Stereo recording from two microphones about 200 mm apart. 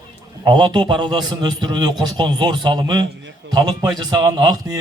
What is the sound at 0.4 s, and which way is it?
A man's voice, 25° right (ahead or behind).